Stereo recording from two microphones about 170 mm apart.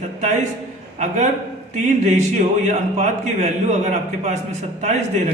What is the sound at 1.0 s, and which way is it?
A man's voice, 45° right (ahead or behind).